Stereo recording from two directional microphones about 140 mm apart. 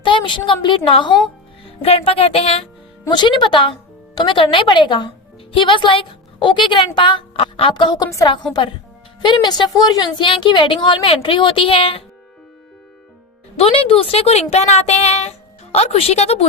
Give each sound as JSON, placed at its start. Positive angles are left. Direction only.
{"t": 0.0, "sound": "a woman's voice", "side_deg": 35}
{"t": 3.1, "sound": "a woman's voice", "side_deg": 35}
{"t": 9.2, "sound": "a woman's voice", "side_deg": 35}
{"t": 13.6, "sound": "a woman's voice", "side_deg": 45}